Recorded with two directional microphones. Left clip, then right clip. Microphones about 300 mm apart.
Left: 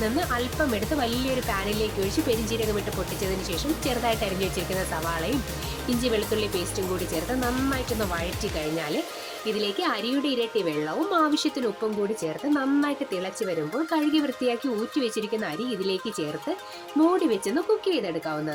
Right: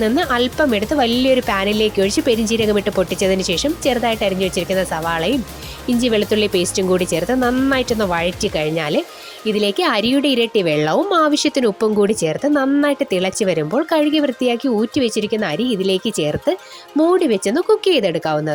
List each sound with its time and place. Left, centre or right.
0.0 s a woman's voice: right